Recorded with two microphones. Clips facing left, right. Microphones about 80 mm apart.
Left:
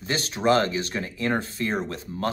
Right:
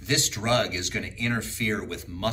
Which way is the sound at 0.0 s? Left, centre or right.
Left.